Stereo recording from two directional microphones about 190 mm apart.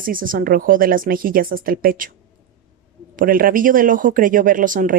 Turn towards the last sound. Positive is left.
turn(degrees=-45)  # may be behind; listen again after turning